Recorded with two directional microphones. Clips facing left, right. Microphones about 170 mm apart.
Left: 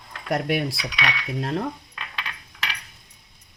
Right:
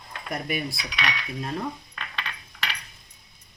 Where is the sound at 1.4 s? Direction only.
70° left (ahead or behind).